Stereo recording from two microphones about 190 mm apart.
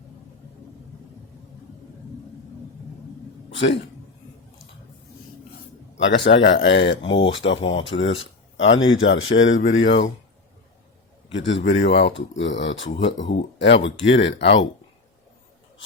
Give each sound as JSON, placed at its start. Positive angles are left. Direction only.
{"t": 3.5, "sound": "a sound", "side_deg": 70}
{"t": 6.0, "sound": "speech", "side_deg": 70}
{"t": 7.4, "sound": "speech", "side_deg": 30}
{"t": 7.9, "sound": "speech", "side_deg": 80}
{"t": 8.5, "sound": "speech", "side_deg": 90}
{"t": 11.3, "sound": "speech", "side_deg": 75}